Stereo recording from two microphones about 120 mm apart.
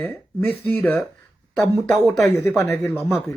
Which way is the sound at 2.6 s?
20° left (ahead or behind).